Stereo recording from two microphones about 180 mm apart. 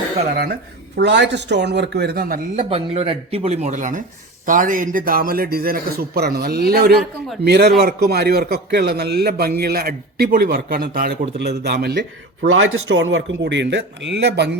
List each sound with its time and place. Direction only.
0.9 s speech: 75° right (ahead or behind); by 2.4 s 55° right (ahead or behind)
2.6 s a man's voice: 35° right (ahead or behind); by 14.6 s 70° right (ahead or behind)